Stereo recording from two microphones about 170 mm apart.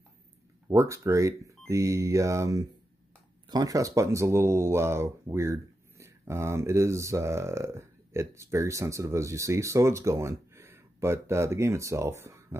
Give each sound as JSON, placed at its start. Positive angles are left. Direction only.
{"t": 0.7, "sound": "speech", "side_deg": -15}